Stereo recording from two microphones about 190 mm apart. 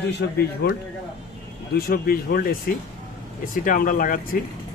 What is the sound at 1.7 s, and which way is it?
Speech, 55° left (ahead or behind).